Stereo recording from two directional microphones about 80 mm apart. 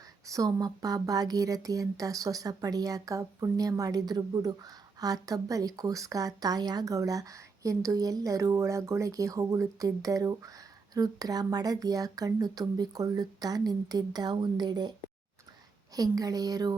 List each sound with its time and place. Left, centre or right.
0.3 s speech: right
16.0 s speech: right